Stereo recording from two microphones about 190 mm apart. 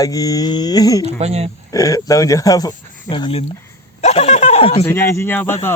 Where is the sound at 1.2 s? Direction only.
35° right (ahead or behind).